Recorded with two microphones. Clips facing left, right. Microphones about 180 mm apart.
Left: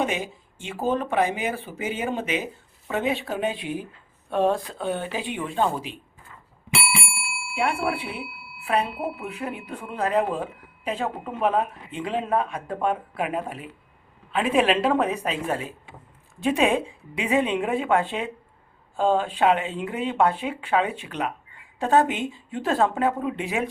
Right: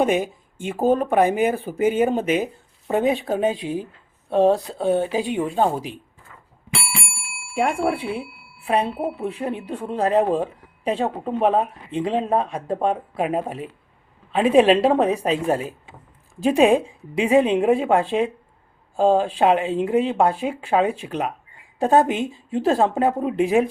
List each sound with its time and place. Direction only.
0.0 s speech: 50° right (ahead or behind)
7.5 s speech: 45° right (ahead or behind)
8.6 s speech: 30° right (ahead or behind)